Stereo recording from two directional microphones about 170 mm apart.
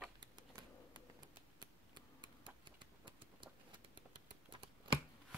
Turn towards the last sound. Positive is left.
turn(degrees=-30)  # may be behind; listen again after turning